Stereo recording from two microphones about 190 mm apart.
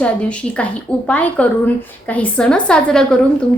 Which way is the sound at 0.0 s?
5° left (ahead or behind).